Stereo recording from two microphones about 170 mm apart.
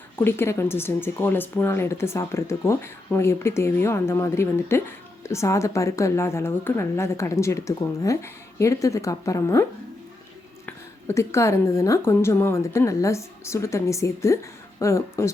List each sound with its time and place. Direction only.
0.2 s speech: 15° left (ahead or behind)
10.7 s speech: 15° left (ahead or behind)